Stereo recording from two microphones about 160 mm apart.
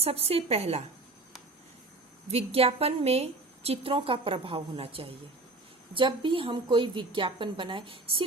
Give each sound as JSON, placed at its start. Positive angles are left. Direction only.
{"t": 0.0, "sound": "a woman's voice", "side_deg": -40}
{"t": 2.2, "sound": "a woman's voice", "side_deg": -40}